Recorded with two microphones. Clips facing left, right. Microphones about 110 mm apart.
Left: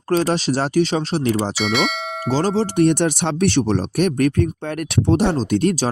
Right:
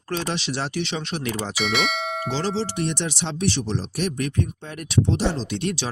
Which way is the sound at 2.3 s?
50° left (ahead or behind).